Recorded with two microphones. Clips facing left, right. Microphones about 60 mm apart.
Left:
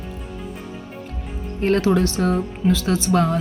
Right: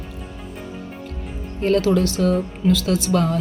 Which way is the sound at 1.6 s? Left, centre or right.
Left.